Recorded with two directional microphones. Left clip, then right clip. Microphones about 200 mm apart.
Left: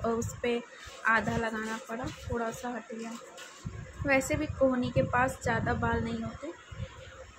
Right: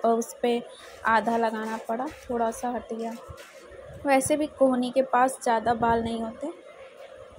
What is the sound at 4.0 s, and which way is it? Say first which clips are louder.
A woman's voice: right 5 dB; 15° right (ahead or behind).